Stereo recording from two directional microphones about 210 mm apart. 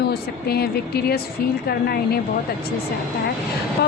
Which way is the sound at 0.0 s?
50° left (ahead or behind).